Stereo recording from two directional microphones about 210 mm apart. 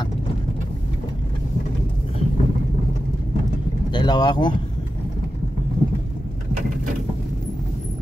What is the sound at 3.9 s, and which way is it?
Speech, 20° left (ahead or behind).